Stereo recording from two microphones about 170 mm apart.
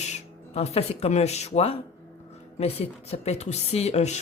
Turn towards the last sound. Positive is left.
turn(degrees=40)  # may be behind; listen again after turning